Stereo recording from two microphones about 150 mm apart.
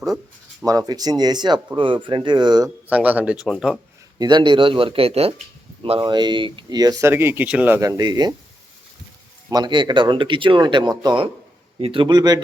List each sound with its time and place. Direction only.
0.6 s speech: 25° right (ahead or behind)
2.8 s speech: 10° right (ahead or behind)
4.2 s speech: 30° right (ahead or behind)
7.1 s speech: 15° right (ahead or behind)
7.8 s speech: 25° right (ahead or behind)
9.5 s speech: 30° right (ahead or behind)